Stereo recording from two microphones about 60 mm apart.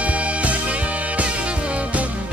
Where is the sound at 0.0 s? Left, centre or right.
Right.